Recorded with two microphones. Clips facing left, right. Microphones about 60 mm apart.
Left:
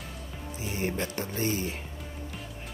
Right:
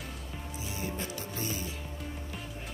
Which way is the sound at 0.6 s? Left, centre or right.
Left.